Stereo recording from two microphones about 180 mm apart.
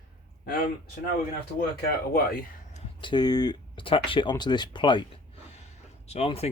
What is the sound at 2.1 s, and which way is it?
Speech, 55° left (ahead or behind).